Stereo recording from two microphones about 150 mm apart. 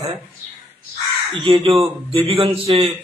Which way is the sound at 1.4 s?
35° right (ahead or behind).